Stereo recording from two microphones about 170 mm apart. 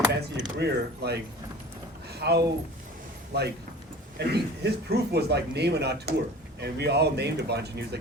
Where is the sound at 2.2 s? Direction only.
70° right (ahead or behind).